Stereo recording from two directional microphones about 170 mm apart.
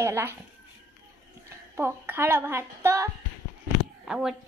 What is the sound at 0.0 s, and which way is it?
Speech, 15° right (ahead or behind).